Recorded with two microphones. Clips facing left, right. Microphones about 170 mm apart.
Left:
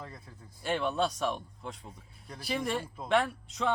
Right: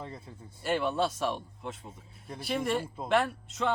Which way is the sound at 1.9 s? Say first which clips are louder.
Right 4 dB; 25° right (ahead or behind).